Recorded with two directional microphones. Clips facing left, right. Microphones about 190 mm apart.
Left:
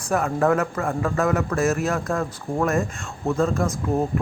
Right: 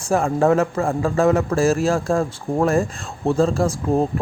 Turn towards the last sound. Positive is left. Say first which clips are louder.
# right 4 dB
turn(degrees=-30)  # may be behind; listen again after turning